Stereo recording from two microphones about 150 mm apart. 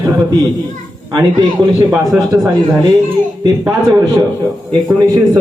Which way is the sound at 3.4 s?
20° right (ahead or behind).